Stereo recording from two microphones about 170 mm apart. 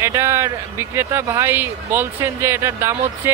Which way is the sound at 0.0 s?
15° right (ahead or behind).